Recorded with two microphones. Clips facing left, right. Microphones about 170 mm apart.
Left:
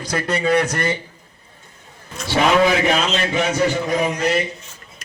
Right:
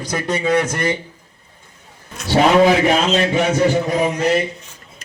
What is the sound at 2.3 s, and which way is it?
A man's voice, 35° right (ahead or behind).